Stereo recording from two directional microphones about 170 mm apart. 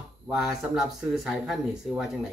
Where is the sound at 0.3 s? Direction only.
5° right (ahead or behind).